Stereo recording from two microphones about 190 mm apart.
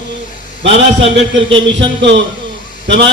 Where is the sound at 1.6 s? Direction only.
70° right (ahead or behind).